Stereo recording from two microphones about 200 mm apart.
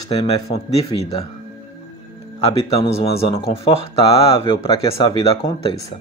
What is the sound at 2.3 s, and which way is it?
Speech, 30° left (ahead or behind).